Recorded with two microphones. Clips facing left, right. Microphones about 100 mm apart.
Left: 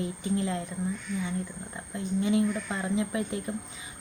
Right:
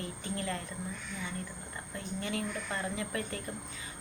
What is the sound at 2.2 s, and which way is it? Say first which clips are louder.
Speech: left 10 dB; 20° left (ahead or behind).